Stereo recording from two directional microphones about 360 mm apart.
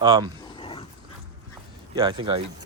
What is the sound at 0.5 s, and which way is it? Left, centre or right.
Dog, centre.